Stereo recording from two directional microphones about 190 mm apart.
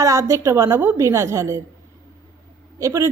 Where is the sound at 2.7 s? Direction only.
15° right (ahead or behind).